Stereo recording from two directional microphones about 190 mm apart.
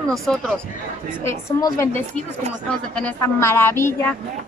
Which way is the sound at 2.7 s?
5° left (ahead or behind).